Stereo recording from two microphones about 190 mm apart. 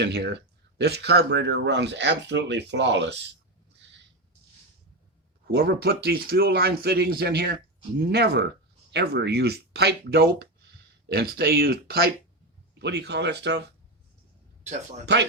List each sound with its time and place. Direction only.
0.0 s speech: 60° right (ahead or behind)
5.5 s speech: 55° right (ahead or behind)
15.0 s speech: 65° right (ahead or behind)